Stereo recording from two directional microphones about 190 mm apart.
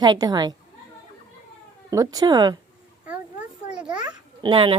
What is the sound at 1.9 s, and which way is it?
Speech, 20° right (ahead or behind).